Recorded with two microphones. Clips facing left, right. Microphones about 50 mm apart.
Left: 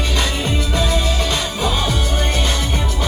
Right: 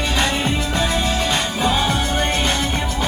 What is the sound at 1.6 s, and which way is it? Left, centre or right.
Music, centre.